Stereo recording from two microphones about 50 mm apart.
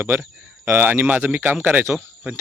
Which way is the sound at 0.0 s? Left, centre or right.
Right.